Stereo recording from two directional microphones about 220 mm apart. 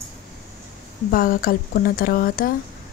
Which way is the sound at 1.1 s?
40° left (ahead or behind).